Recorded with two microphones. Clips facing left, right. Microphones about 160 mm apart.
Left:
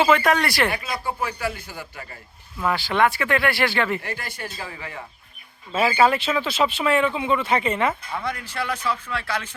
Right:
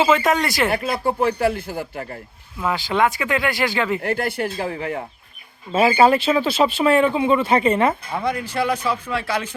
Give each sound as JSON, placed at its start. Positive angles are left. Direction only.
{"t": 0.2, "sound": "speech", "side_deg": -20}
{"t": 0.7, "sound": "speech", "side_deg": -55}
{"t": 2.6, "sound": "speech", "side_deg": -20}
{"t": 4.0, "sound": "speech", "side_deg": -60}
{"t": 5.7, "sound": "speech", "side_deg": -40}
{"t": 8.1, "sound": "speech", "side_deg": -15}